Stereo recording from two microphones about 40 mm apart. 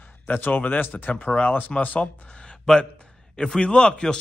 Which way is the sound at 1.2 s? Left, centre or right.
Left.